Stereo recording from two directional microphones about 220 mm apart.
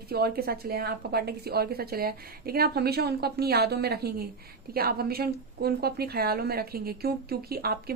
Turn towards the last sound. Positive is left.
turn(degrees=-45)  # may be behind; listen again after turning